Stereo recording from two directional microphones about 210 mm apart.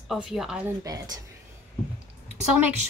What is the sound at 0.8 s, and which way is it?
Speech, 15° right (ahead or behind).